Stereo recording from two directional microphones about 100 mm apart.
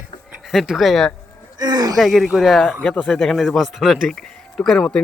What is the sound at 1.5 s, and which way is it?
Speech, 40° right (ahead or behind).